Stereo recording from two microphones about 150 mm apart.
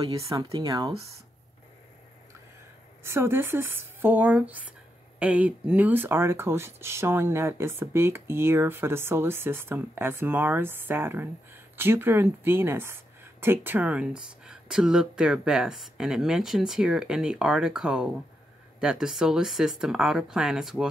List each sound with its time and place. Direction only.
0.0 s speech: 40° right (ahead or behind)
3.0 s speech: 15° right (ahead or behind)